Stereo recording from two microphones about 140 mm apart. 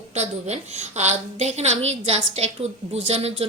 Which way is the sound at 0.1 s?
50° right (ahead or behind).